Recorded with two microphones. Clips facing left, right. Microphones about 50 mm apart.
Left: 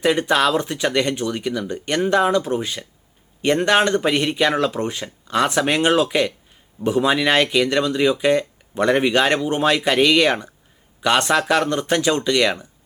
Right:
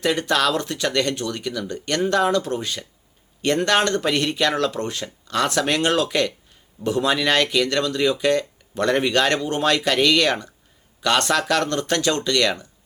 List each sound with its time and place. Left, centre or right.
0.0 s speech: centre